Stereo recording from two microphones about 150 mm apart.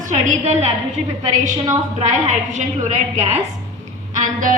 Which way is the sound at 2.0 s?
50° right (ahead or behind).